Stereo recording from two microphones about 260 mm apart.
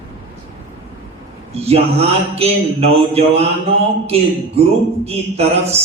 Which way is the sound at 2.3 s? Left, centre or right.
Right.